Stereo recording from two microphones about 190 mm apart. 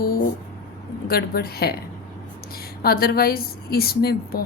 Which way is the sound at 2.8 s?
50° left (ahead or behind).